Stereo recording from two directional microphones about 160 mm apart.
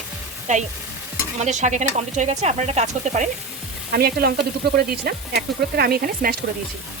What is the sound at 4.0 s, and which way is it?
Sizzle, 75° right (ahead or behind).